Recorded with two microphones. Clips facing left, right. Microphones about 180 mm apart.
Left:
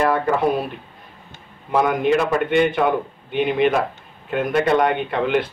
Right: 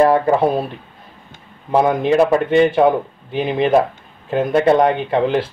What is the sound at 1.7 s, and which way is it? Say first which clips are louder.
A man's voice: right 3 dB; 30° right (ahead or behind).